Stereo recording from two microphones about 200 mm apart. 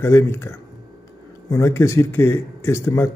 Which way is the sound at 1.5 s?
15° left (ahead or behind).